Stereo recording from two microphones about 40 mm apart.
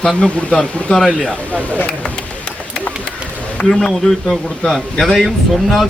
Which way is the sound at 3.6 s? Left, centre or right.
Centre.